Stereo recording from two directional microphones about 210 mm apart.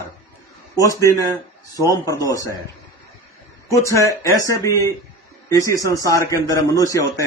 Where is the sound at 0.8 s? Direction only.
15° left (ahead or behind).